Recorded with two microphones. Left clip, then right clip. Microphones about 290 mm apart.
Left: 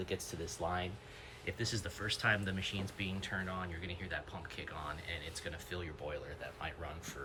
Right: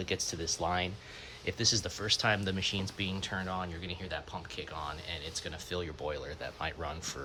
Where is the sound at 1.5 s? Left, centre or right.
Centre.